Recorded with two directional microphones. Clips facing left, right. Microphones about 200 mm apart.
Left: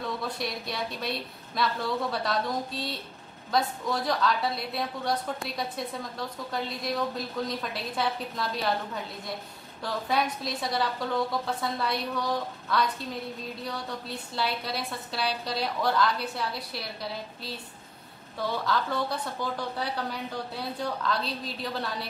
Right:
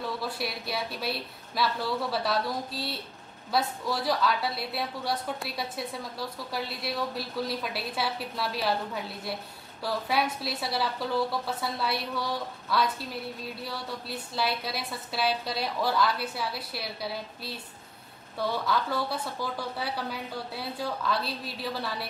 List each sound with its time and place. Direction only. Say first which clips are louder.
0.0 s a woman's voice: even; 5° right (ahead or behind)
9.8 s a woman's voice: even; 5° right (ahead or behind)
18.7 s a woman's voice: even; 5° right (ahead or behind)
19.4 s speech: left 3 dB; 20° left (ahead or behind)
19.8 s a woman's voice: left 1 dB; 5° right (ahead or behind)